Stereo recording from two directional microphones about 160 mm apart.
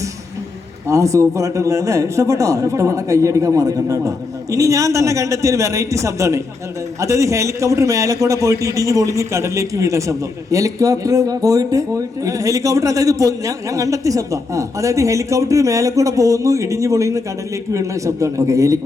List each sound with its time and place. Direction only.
0.9 s a man's voice: 20° right (ahead or behind)